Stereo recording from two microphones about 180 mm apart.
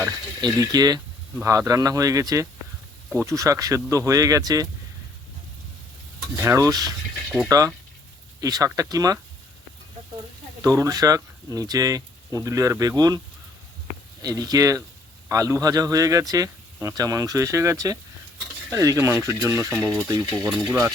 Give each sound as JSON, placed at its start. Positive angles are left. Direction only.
{"t": 0.4, "sound": "speech", "side_deg": -20}
{"t": 6.3, "sound": "speech", "side_deg": -15}
{"t": 7.3, "sound": "speech", "side_deg": -5}
{"t": 8.4, "sound": "speech", "side_deg": -20}
{"t": 10.6, "sound": "speech", "side_deg": -20}
{"t": 19.7, "sound": "speech", "side_deg": 10}
{"t": 20.7, "sound": "speech", "side_deg": -10}